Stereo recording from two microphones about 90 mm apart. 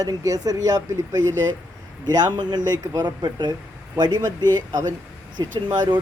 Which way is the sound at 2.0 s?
55° right (ahead or behind).